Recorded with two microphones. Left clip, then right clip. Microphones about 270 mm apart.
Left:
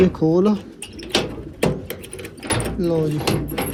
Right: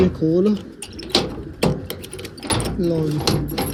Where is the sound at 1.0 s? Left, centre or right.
Right.